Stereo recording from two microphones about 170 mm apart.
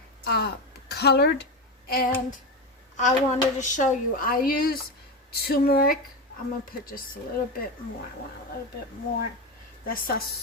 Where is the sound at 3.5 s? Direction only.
45° left (ahead or behind); by 6.0 s 60° left (ahead or behind).